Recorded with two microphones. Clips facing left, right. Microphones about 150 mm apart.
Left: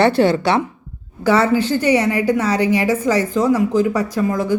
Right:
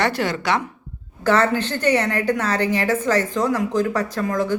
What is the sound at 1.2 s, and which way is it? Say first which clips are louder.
Speech: left 3 dB; 10° left (ahead or behind).